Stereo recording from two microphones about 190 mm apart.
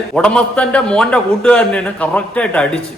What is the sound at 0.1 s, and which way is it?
A man's voice, 5° left (ahead or behind).